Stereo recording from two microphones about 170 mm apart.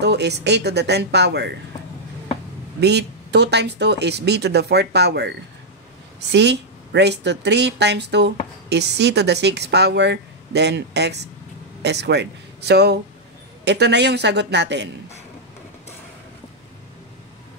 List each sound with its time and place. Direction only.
0.0 s speech: 80° right
2.8 s speech: 80° right
6.3 s a woman's voice: 90° right